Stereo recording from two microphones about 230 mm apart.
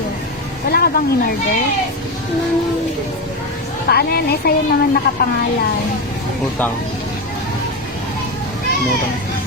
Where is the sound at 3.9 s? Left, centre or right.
Left.